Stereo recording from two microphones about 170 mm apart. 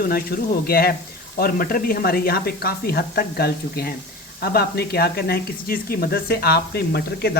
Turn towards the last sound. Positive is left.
turn(degrees=70)  # may be behind; listen again after turning